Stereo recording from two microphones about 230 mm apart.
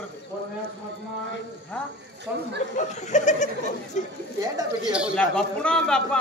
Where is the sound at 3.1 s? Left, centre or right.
Left.